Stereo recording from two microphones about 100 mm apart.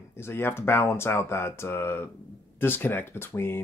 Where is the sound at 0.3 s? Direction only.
25° left (ahead or behind).